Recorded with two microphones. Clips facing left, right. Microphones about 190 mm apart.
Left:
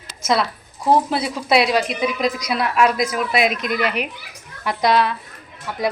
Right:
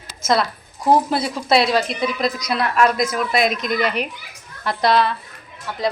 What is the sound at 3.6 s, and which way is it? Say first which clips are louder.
Speech: right 1 dB; 40° right (ahead or behind).